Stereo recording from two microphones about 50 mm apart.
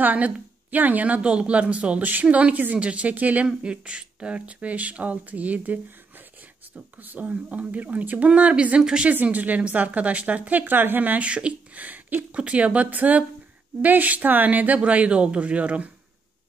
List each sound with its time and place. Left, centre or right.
0.0 s a woman's voice: right
3.4 s a woman's voice: right
11.2 s speech: right
12.4 s speech: right